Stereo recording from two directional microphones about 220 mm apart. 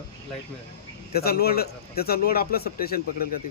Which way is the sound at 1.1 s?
45° left (ahead or behind).